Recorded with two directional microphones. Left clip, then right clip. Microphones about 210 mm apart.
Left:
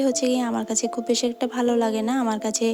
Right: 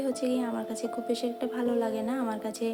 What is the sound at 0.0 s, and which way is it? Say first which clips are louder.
Speech: left 7 dB; 45° left (ahead or behind).